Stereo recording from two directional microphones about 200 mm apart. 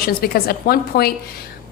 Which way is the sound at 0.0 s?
50° left (ahead or behind).